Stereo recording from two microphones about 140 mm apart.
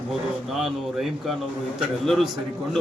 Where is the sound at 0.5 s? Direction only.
Centre (ahead or behind).